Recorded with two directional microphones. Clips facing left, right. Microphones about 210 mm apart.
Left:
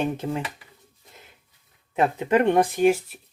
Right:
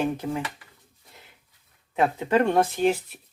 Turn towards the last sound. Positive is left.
turn(degrees=10)  # may be behind; listen again after turning